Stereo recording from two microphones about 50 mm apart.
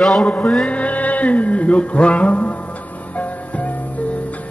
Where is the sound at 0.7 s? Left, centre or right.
Left.